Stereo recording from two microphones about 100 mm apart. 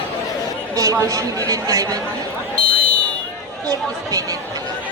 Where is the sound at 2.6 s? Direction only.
10° left (ahead or behind).